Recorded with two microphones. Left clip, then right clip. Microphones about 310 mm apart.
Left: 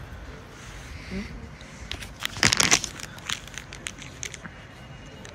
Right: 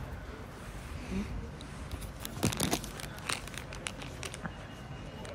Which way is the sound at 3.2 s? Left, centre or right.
Centre.